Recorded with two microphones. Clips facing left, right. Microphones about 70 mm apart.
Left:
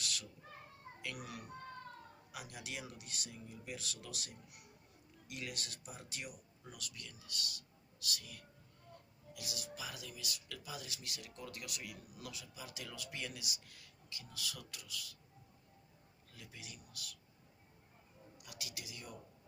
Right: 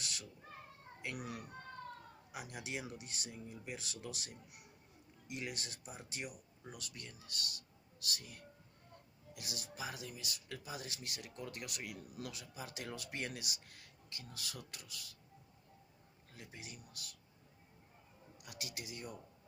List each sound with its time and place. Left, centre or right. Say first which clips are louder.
0.0 s cat: left 2 dB; right
1.0 s speech: right 2 dB; right
5.3 s speech: right 2 dB; right
16.3 s speech: right 2 dB; right
18.4 s speech: right 3 dB; right